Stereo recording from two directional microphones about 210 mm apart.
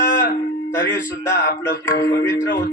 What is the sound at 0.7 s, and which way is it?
Music, 10° left (ahead or behind).